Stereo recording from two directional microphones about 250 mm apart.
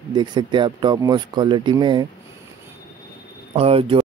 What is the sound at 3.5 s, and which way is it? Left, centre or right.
Speech, right.